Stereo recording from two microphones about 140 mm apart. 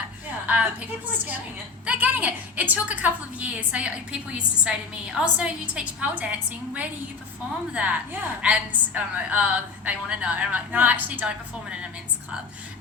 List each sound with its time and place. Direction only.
0.4 s a woman's voice: 10° right (ahead or behind)
7.7 s a woman's voice: 10° right (ahead or behind)